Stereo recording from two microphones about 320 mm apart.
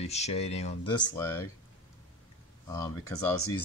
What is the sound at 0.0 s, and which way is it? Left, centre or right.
Speech, centre.